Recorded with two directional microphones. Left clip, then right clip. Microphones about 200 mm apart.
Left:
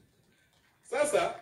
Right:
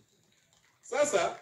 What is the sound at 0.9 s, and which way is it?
Speech, 40° right (ahead or behind).